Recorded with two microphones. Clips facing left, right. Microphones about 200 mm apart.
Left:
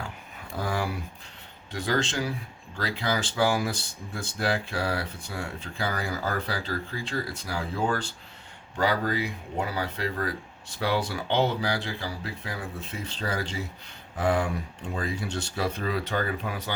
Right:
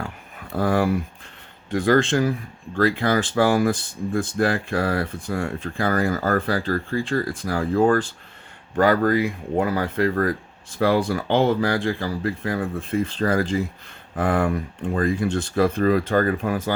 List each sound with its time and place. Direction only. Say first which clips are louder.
0.5 s speech: right 10 dB; 55° right (ahead or behind)